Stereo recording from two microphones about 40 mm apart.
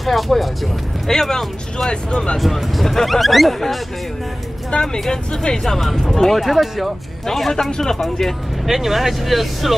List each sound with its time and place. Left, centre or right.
0.0 s speech: centre
1.9 s speech: left
2.3 s speech: centre
4.6 s speech: centre
6.4 s speech: centre
8.6 s speech: centre